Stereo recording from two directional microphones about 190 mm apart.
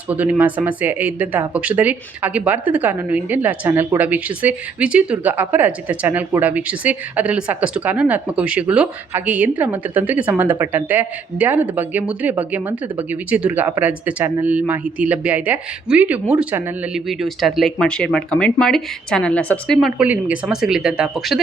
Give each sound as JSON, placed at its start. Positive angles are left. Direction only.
{"t": 0.1, "sound": "speech", "side_deg": -10}